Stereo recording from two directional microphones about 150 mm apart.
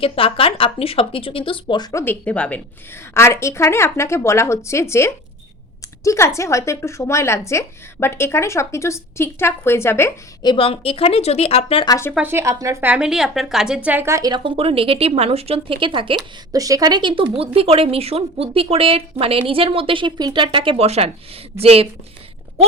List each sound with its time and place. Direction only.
0.0 s speech: 40° left (ahead or behind); by 2.1 s 20° left (ahead or behind)
2.2 s a woman's voice: 10° left (ahead or behind)
10.4 s speech: 35° left (ahead or behind)
11.9 s a woman's voice: 20° left (ahead or behind)
12.1 s speech: 15° right (ahead or behind)
12.9 s a woman's voice: 5° right (ahead or behind); by 21.8 s 40° right (ahead or behind)